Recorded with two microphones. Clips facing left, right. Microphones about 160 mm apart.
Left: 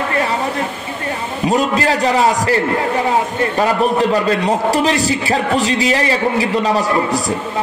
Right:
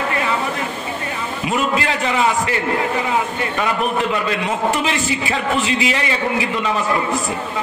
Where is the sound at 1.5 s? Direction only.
40° left (ahead or behind).